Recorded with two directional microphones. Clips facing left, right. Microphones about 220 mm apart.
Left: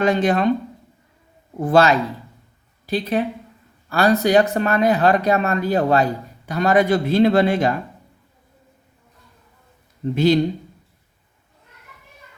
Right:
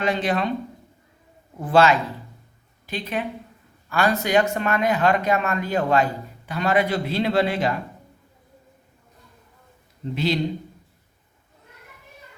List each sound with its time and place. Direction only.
0.0 s speech: 45° left (ahead or behind)
1.6 s speech: 40° left (ahead or behind)
10.2 s speech: 45° left (ahead or behind)